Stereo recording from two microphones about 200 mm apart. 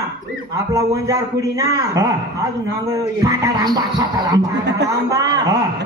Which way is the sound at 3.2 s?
15° right (ahead or behind).